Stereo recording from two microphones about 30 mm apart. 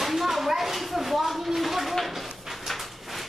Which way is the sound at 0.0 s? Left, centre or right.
Centre.